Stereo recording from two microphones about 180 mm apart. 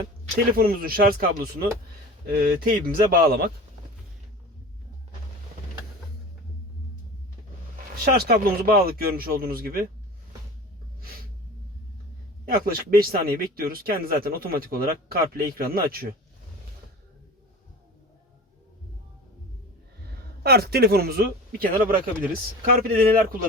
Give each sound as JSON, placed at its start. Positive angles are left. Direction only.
{"t": 0.3, "sound": "speech", "side_deg": -55}
{"t": 8.0, "sound": "speech", "side_deg": -60}
{"t": 12.5, "sound": "speech", "side_deg": -55}
{"t": 20.4, "sound": "speech", "side_deg": -60}